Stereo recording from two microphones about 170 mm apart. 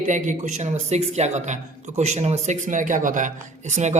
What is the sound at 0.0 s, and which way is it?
A man's voice, 45° right (ahead or behind).